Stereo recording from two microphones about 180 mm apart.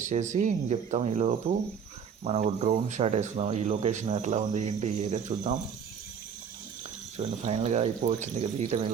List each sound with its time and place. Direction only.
0.0 s speech: 40° right (ahead or behind)
7.2 s speech: 35° right (ahead or behind)